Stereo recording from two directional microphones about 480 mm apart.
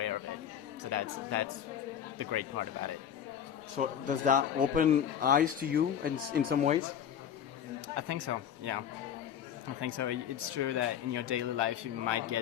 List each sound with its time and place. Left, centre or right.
0.9 s speech: right
3.8 s a man's voice: centre
7.9 s speech: right
9.8 s speech: right